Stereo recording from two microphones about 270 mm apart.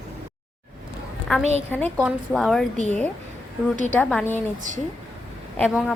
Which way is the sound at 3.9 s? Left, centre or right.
Centre.